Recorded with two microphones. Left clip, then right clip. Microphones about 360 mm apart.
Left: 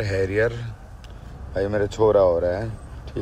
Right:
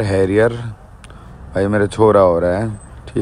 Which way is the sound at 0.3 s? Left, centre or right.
Centre.